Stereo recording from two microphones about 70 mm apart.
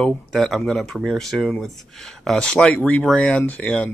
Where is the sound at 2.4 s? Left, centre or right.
Centre.